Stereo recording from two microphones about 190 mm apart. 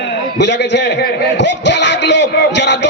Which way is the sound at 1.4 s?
65° left (ahead or behind).